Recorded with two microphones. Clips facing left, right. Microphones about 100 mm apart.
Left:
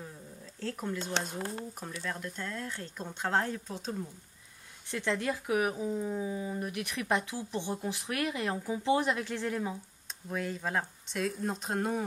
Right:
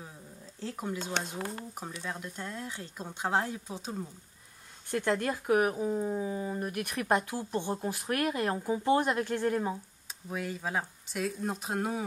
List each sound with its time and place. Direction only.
0.6 s speech: 15° right (ahead or behind)
4.9 s speech: 45° right (ahead or behind)
10.3 s speech: 5° right (ahead or behind)